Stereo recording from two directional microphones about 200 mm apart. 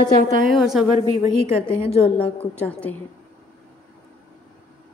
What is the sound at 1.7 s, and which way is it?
Speech, 30° left (ahead or behind).